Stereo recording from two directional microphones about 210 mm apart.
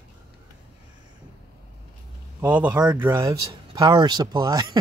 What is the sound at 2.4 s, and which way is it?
Speech, 5° right (ahead or behind).